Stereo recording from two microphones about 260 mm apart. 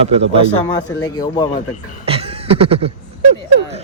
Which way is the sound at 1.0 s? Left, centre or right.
Centre.